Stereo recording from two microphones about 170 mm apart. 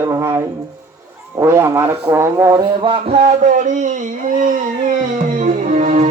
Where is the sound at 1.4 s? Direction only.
15° right (ahead or behind).